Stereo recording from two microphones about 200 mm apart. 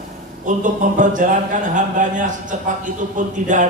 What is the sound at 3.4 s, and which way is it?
Speech, 40° right (ahead or behind).